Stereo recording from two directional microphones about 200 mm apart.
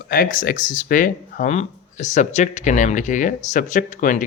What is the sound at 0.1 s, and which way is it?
Speech, 45° left (ahead or behind).